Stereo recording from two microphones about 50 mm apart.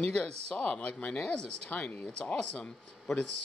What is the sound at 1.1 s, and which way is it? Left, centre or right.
Speech, centre.